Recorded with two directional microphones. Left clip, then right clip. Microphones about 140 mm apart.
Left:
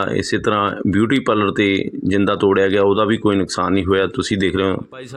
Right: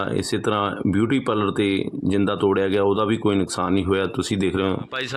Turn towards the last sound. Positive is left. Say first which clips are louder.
# left 5 dB
turn(degrees=20)  # may be behind; listen again after turning